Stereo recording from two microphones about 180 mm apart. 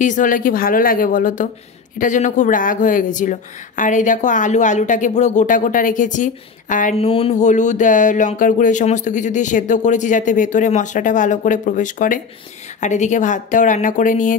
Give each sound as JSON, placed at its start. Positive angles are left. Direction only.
{"t": 0.0, "sound": "speech", "side_deg": 45}